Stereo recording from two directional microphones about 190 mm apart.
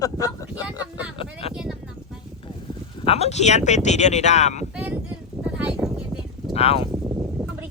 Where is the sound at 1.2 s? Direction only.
30° left (ahead or behind).